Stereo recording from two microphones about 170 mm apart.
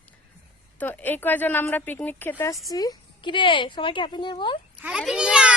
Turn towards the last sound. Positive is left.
turn(degrees=-5)  # may be behind; listen again after turning